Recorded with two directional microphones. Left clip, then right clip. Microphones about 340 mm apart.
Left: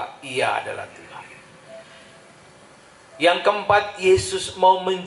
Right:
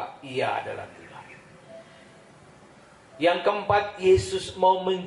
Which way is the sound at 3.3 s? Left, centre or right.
Centre.